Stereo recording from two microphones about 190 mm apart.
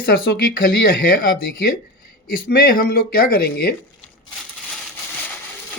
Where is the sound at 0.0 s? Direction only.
50° left (ahead or behind).